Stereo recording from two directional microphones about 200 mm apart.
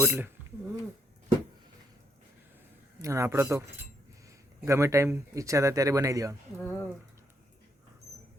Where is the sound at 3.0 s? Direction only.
15° right (ahead or behind).